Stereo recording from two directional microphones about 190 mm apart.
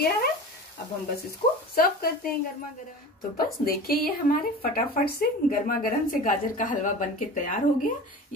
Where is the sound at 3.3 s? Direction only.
50° left (ahead or behind).